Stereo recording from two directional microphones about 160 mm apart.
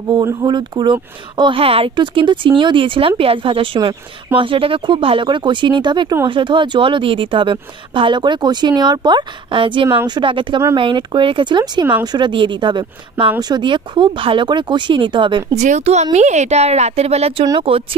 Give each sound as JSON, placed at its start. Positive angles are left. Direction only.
{"t": 0.1, "sound": "speech", "side_deg": -25}
{"t": 15.5, "sound": "a woman's voice", "side_deg": -45}